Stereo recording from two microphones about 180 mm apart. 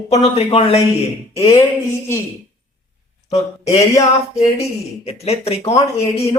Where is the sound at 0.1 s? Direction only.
35° left (ahead or behind).